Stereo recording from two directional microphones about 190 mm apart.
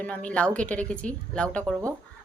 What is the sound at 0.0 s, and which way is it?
Speech, 5° left (ahead or behind).